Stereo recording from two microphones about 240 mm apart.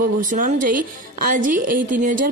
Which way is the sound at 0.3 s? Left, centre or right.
Right.